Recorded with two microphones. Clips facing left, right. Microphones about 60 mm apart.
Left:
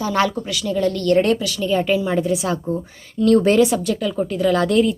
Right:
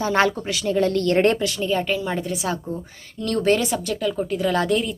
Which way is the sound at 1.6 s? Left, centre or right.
Centre.